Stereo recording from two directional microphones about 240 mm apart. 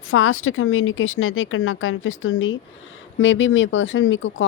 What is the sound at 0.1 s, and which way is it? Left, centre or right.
Speech, left.